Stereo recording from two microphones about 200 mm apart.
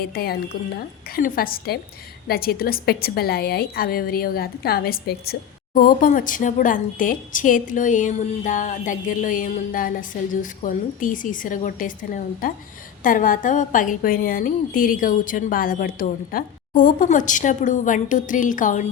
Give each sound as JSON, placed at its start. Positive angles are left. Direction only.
{"t": 0.0, "sound": "a woman's voice", "side_deg": 50}